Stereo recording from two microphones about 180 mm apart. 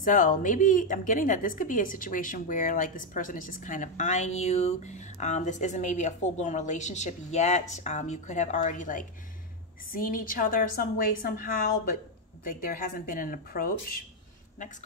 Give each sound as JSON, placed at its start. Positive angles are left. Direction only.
{"t": 0.0, "sound": "a woman's voice", "side_deg": 50}